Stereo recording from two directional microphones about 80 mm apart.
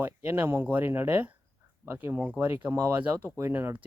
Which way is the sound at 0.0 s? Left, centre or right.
Right.